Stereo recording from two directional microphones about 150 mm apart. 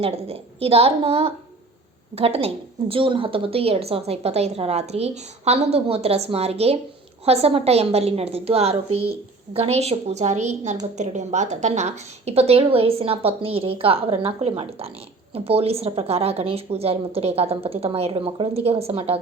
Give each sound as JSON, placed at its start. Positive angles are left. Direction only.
{"t": 0.0, "sound": "a woman's voice", "side_deg": -40}